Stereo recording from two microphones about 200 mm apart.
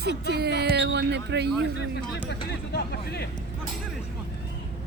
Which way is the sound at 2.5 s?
55° left (ahead or behind).